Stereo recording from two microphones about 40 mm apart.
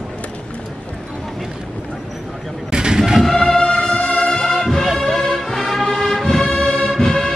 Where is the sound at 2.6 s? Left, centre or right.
Centre.